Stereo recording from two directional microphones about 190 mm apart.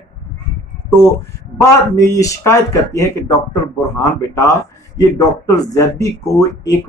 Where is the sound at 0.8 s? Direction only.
10° left (ahead or behind).